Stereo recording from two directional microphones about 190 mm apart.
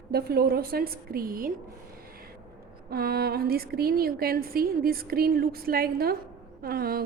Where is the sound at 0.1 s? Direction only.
55° right (ahead or behind).